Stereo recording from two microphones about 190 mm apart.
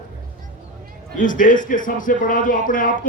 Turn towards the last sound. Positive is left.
turn(degrees=45)  # may be behind; listen again after turning